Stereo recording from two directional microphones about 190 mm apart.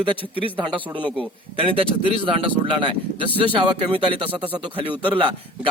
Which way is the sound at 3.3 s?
25° right (ahead or behind).